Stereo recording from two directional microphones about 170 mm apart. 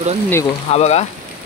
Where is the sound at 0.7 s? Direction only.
40° left (ahead or behind).